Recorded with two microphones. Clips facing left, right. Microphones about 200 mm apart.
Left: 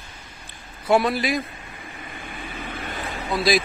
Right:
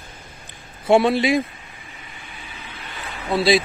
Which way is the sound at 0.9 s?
25° right (ahead or behind).